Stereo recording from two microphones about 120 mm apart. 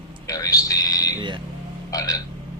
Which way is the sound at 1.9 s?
30° left (ahead or behind).